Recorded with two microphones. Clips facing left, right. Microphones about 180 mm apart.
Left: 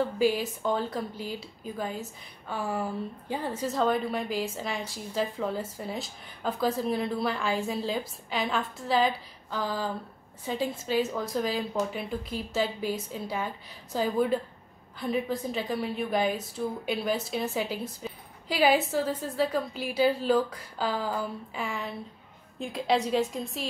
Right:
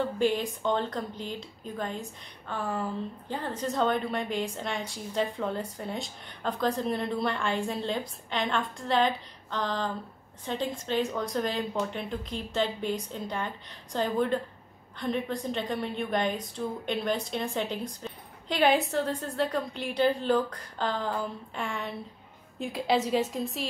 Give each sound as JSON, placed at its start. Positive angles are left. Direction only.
{"t": 0.2, "sound": "a woman's voice", "side_deg": 5}